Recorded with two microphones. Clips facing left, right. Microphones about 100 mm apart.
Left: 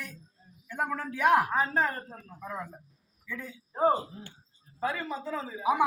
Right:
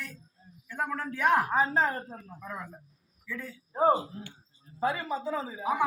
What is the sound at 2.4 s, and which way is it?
A man's voice, 10° left (ahead or behind).